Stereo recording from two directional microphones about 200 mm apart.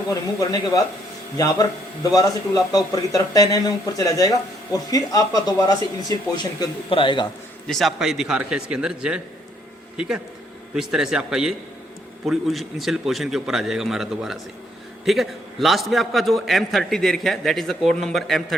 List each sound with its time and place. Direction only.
0.1 s a man's voice: 15° left (ahead or behind)
2.1 s a man's voice: 20° left (ahead or behind)
7.7 s a man's voice: centre (ahead or behind)
10.8 s a man's voice: 5° right (ahead or behind)